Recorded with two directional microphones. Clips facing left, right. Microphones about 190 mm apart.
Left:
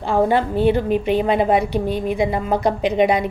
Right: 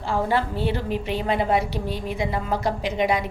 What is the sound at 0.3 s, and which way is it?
A woman's voice, 20° left (ahead or behind).